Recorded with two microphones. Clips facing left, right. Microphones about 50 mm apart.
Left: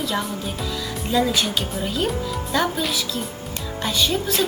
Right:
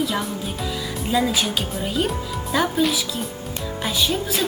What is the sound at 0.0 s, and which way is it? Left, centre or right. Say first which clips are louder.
A woman's voice: right 1 dB; centre.